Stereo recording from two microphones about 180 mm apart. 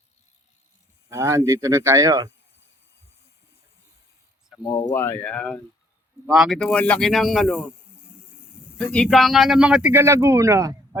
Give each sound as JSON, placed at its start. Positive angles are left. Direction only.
{"t": 1.1, "sound": "speech", "side_deg": -15}
{"t": 4.6, "sound": "speech", "side_deg": 20}
{"t": 8.8, "sound": "speech", "side_deg": 5}